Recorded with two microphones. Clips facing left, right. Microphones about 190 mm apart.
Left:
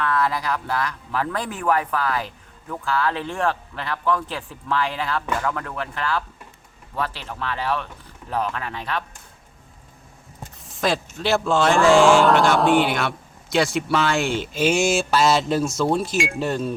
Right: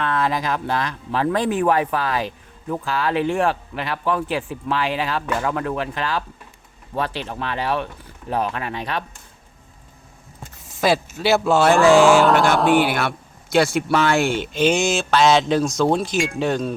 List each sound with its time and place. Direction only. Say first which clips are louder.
0.0 s speech: right 1 dB; 25° right (ahead or behind)
10.6 s speech: right 4 dB; centre (ahead or behind)